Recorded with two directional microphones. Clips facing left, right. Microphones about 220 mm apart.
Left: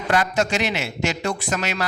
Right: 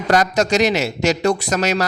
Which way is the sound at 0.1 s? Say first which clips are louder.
Right 5 dB; 40° right (ahead or behind).